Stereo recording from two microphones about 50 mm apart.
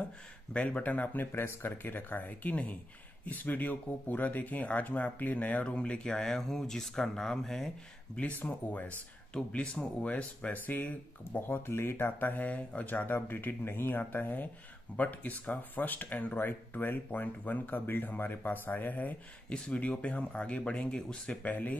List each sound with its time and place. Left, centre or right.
0.5 s speech: left
1.2 s speech: left
6.1 s speech: centre
8.2 s speech: left
10.7 s speech: left
12.2 s speech: left
19.5 s speech: centre
21.3 s speech: left